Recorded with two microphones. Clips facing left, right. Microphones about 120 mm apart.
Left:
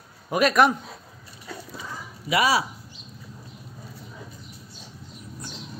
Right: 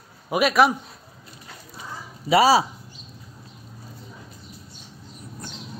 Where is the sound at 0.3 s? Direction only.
5° right (ahead or behind).